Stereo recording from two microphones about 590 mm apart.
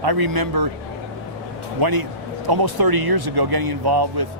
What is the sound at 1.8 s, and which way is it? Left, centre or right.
Speech, right.